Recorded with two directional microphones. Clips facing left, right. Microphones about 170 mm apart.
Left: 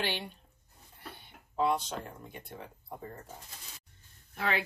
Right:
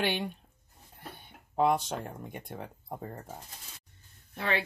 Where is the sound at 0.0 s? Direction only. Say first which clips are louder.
Right 5 dB; 55° right (ahead or behind).